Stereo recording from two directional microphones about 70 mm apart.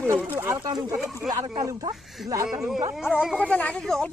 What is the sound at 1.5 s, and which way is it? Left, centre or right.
Speech, right.